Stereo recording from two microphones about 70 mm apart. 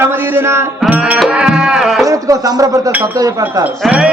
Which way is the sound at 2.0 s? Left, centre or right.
Right.